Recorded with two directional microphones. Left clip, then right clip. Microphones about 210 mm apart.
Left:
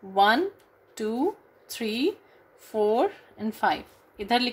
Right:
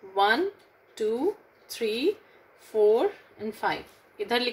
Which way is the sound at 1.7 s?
55° left (ahead or behind).